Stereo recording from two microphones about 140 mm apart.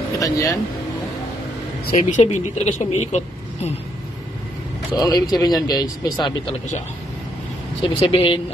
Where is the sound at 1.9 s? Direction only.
65° left (ahead or behind).